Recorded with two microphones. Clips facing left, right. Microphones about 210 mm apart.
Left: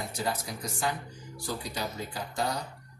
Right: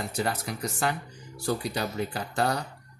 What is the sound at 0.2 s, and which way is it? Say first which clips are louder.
Speech: right 3 dB; 65° right (ahead or behind).